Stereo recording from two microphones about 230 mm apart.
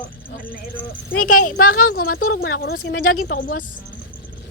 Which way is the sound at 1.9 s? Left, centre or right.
Left.